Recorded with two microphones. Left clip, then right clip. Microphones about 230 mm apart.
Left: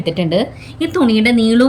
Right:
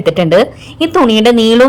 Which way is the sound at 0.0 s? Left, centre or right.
Right.